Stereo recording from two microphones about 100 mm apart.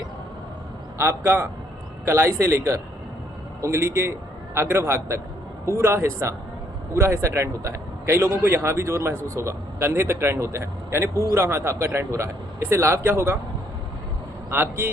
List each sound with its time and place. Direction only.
0.9 s a man's voice: 25° right (ahead or behind)
14.5 s a man's voice: 20° right (ahead or behind)